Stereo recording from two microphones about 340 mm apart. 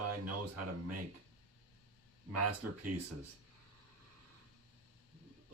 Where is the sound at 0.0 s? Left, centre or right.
Right.